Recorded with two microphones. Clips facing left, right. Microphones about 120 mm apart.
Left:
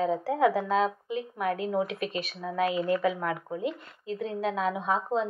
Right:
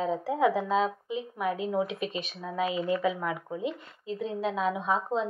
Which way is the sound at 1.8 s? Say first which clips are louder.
Left 1 dB; 50° left (ahead or behind).